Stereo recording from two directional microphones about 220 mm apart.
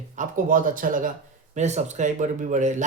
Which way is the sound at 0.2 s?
40° right (ahead or behind).